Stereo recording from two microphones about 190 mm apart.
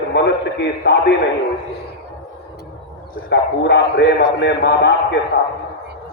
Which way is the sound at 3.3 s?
65° left (ahead or behind).